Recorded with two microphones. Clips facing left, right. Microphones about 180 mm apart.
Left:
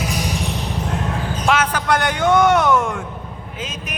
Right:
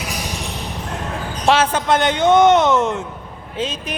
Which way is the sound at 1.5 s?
25° right (ahead or behind).